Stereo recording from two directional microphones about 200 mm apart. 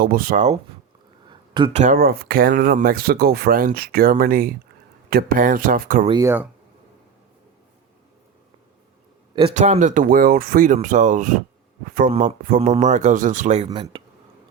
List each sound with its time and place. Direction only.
0.0 s speech: 45° right (ahead or behind)
1.3 s a sound: 25° right (ahead or behind)
1.8 s speech: 45° right (ahead or behind)
6.1 s speech: 15° right (ahead or behind)
9.6 s speech: 35° right (ahead or behind)
13.7 s speech: 20° right (ahead or behind)